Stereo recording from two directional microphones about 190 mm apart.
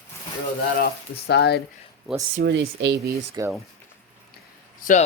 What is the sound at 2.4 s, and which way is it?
Speech, 70° right (ahead or behind).